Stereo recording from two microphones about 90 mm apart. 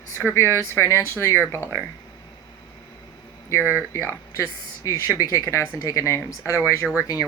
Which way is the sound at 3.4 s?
25° left (ahead or behind).